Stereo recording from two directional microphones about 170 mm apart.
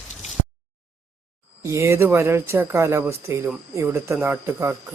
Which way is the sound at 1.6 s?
15° right (ahead or behind).